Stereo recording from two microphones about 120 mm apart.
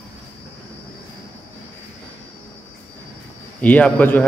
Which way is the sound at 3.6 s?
10° left (ahead or behind).